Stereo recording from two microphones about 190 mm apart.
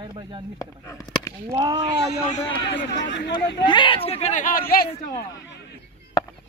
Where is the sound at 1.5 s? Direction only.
20° right (ahead or behind).